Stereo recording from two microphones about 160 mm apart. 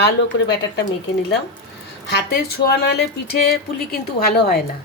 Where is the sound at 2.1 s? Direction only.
75° left (ahead or behind).